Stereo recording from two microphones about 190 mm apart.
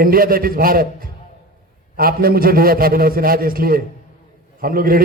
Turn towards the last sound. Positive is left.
turn(degrees=-50)  # may be behind; listen again after turning